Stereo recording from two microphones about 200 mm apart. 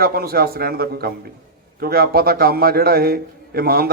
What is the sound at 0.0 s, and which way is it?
A man's voice, 50° right (ahead or behind).